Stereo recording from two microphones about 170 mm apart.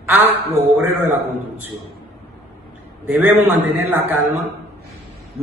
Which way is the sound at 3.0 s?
10° right (ahead or behind).